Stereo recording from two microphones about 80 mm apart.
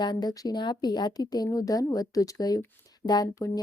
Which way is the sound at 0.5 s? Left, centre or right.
Left.